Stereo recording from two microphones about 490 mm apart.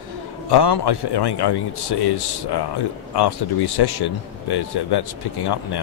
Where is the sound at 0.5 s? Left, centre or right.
Left.